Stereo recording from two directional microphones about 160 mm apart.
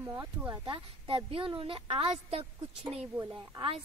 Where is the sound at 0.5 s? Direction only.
30° right (ahead or behind).